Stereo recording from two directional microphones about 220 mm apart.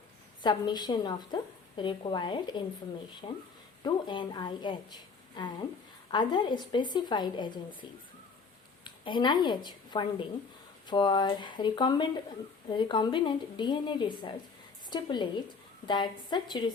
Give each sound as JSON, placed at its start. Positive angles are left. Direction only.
{"t": 0.4, "sound": "a woman's voice", "side_deg": 20}